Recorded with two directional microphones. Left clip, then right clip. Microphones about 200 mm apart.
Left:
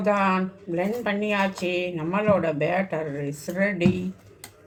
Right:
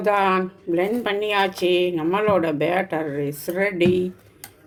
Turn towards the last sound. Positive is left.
turn(degrees=-50)  # may be behind; listen again after turning